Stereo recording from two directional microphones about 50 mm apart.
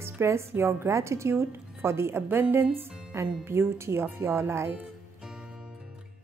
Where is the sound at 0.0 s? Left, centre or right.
Right.